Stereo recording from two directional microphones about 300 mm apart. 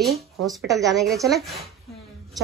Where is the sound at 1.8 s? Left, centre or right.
Centre.